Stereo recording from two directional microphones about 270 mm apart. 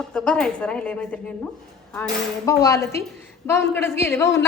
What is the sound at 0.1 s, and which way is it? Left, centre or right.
A woman's voice, centre.